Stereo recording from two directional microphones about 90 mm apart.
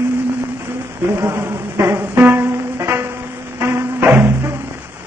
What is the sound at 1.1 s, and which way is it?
Music, 25° right (ahead or behind).